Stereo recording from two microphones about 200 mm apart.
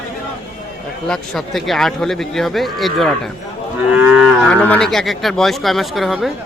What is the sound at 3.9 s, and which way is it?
Livestock, 5° right (ahead or behind).